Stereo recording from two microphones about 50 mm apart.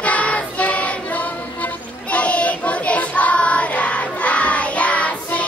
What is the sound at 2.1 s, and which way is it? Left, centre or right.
Child singing, left.